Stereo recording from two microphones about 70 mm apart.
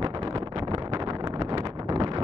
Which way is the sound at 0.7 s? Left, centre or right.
Right.